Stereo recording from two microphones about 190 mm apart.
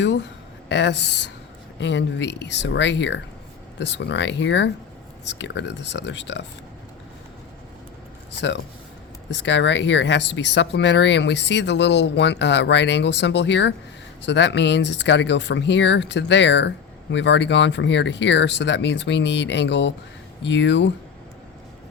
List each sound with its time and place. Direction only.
0.0 s speech: 65° left (ahead or behind)
8.4 s speech: 70° left (ahead or behind)